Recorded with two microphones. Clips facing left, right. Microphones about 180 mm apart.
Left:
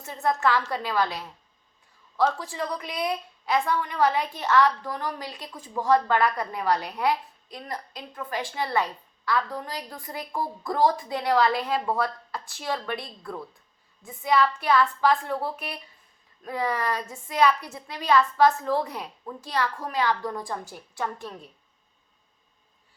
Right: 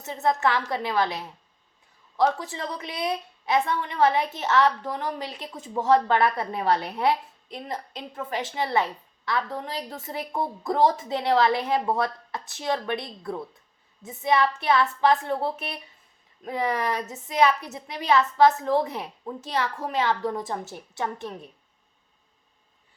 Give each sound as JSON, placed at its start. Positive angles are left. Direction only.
{"t": 0.0, "sound": "a woman's voice", "side_deg": -20}